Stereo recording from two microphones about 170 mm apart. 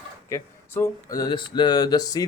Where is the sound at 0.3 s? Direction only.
15° left (ahead or behind).